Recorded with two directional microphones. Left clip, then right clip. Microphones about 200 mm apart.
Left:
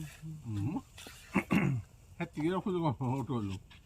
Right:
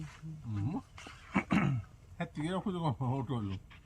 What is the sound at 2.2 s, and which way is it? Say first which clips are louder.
Speech: left 3 dB; 30° right (ahead or behind).